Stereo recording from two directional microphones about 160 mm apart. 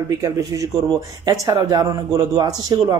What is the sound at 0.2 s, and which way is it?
Speech, 20° right (ahead or behind).